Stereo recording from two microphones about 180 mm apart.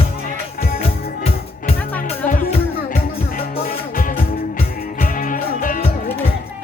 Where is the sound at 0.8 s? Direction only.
35° left (ahead or behind).